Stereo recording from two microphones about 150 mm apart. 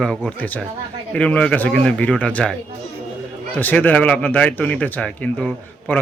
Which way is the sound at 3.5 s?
10° left (ahead or behind).